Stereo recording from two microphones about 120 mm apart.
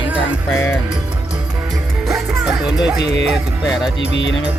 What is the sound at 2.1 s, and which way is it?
Music, 5° right (ahead or behind).